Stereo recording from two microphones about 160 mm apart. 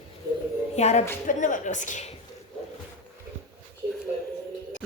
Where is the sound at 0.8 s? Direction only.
45° left (ahead or behind).